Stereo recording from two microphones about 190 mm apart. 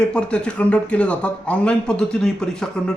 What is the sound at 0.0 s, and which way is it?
A man's voice, 5° left (ahead or behind).